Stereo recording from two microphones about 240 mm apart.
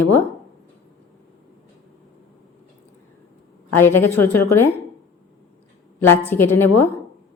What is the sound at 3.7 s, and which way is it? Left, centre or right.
Speech, centre.